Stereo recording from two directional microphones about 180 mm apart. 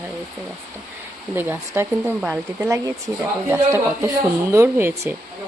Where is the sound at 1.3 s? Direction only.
10° right (ahead or behind).